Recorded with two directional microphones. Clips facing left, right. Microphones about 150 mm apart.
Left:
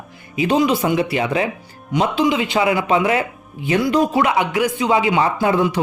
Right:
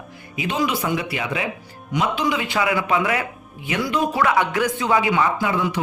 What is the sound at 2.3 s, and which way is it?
Speech, 20° left (ahead or behind).